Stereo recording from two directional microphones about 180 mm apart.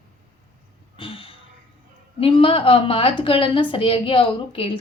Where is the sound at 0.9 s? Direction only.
30° left (ahead or behind).